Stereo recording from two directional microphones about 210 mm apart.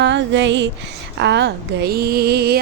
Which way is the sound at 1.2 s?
55° right (ahead or behind).